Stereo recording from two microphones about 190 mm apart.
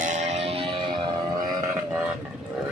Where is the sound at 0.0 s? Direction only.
35° right (ahead or behind).